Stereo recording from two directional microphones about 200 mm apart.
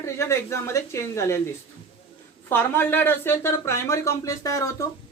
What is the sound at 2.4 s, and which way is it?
Speech, 10° left (ahead or behind).